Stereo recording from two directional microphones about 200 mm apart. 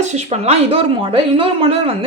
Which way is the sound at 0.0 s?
35° right (ahead or behind).